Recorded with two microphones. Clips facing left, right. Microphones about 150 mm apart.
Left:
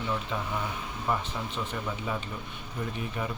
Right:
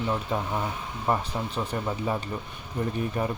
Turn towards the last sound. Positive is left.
turn(degrees=-40)  # may be behind; listen again after turning